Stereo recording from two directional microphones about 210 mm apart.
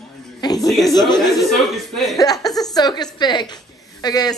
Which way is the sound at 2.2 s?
20° left (ahead or behind).